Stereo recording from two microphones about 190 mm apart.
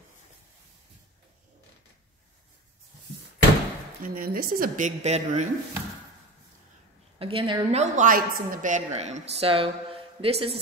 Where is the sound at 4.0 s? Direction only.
50° right (ahead or behind).